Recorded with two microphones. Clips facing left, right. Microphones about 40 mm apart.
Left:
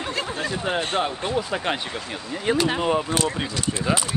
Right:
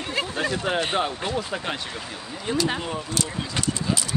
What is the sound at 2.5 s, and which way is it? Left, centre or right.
Speech, left.